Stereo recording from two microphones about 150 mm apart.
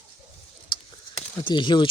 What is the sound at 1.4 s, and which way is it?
Speech, 30° left (ahead or behind).